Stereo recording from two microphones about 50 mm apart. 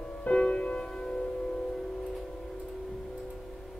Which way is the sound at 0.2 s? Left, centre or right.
Centre.